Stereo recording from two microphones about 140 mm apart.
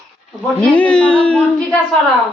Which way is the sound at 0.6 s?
10° left (ahead or behind).